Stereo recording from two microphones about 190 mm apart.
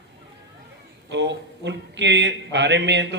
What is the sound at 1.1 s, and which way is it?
Speech, 70° right (ahead or behind).